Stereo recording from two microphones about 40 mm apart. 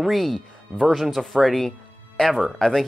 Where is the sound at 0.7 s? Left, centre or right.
Right.